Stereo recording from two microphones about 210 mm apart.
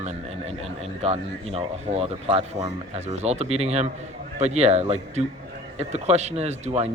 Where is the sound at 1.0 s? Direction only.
30° right (ahead or behind).